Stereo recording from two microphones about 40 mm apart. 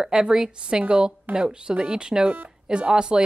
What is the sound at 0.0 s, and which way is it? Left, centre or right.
A woman's voice, centre.